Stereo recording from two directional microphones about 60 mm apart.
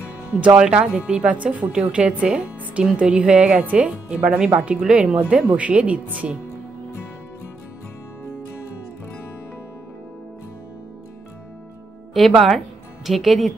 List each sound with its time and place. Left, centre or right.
0.6 s a woman's voice: centre
12.1 s a woman's voice: centre